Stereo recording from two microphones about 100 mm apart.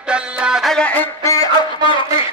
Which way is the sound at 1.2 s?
35° left (ahead or behind).